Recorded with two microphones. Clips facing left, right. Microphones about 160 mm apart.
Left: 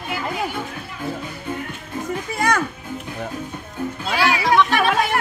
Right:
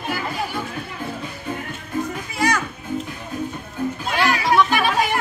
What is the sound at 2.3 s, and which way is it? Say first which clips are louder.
Music: even; 55° left (ahead or behind).